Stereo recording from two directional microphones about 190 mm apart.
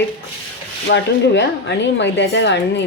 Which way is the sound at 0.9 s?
70° left (ahead or behind).